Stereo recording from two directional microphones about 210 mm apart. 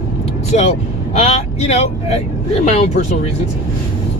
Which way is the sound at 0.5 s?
35° left (ahead or behind).